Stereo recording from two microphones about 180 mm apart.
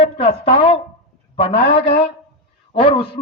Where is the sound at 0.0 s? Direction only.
30° left (ahead or behind).